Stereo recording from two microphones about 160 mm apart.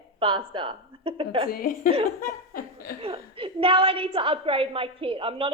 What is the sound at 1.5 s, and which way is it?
Speech, 65° left (ahead or behind).